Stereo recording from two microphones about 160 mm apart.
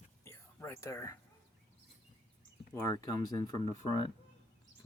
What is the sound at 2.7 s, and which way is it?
Speech, 20° left (ahead or behind).